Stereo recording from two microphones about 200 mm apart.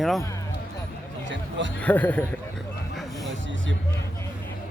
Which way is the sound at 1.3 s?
65° right (ahead or behind).